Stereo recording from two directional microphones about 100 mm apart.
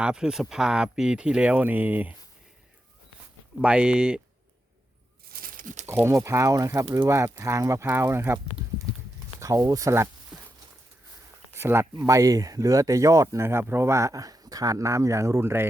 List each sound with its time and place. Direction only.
0.0 s speech: 5° right (ahead or behind)
3.6 s speech: 10° right (ahead or behind)
5.8 s speech: 25° right (ahead or behind)
9.4 s speech: 35° right (ahead or behind)
10.3 s a sound: 10° right (ahead or behind)
11.5 s speech: 25° right (ahead or behind)